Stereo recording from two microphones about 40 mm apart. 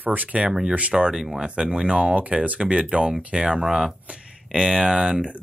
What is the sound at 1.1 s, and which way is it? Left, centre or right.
Speech, centre.